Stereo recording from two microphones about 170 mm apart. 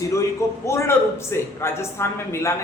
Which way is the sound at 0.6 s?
15° left (ahead or behind).